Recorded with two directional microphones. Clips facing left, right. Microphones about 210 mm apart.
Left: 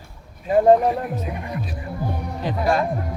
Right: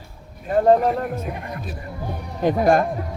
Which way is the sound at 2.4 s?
50° right (ahead or behind).